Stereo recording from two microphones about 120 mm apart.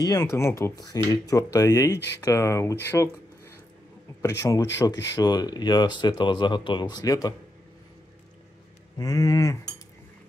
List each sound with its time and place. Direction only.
0.0 s speech: 35° left (ahead or behind)
0.3 s speech: 25° left (ahead or behind)
8.9 s speech: 30° left (ahead or behind)